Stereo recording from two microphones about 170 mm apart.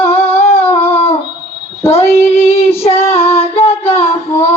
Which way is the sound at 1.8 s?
35° left (ahead or behind).